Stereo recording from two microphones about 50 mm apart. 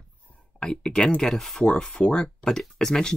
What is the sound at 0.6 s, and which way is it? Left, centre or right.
Speech, centre.